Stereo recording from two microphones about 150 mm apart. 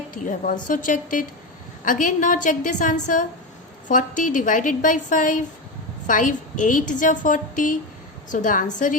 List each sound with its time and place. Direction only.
0.1 s a woman's voice: 60° left (ahead or behind)